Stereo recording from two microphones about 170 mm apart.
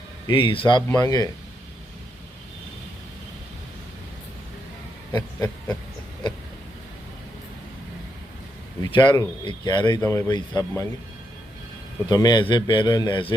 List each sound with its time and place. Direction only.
0.3 s a man's voice: 30° left (ahead or behind)
5.1 s a man's voice: 20° left (ahead or behind)
8.8 s a man's voice: 25° left (ahead or behind)
12.0 s a man's voice: 25° left (ahead or behind)